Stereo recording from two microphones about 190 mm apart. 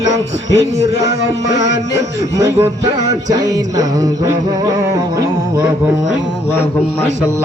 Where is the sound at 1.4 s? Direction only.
70° left (ahead or behind).